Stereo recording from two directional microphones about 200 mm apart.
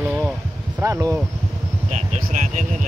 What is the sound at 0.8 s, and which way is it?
Speech, 15° right (ahead or behind).